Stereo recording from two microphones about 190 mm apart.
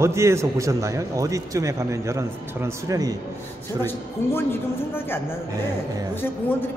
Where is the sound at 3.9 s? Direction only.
10° left (ahead or behind).